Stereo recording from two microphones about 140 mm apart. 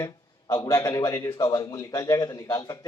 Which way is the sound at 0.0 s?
25° left (ahead or behind).